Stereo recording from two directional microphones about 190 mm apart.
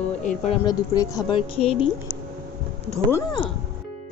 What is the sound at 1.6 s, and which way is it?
Speech, 30° left (ahead or behind).